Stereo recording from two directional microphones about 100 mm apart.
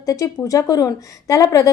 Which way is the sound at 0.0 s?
35° left (ahead or behind).